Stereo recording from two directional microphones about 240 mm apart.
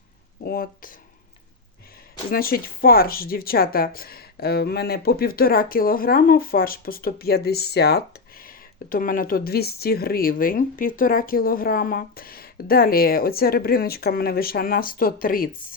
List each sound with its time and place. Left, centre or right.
0.4 s speech: left
2.3 s speech: left